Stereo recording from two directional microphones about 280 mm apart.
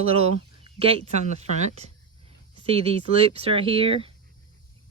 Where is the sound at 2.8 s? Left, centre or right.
Right.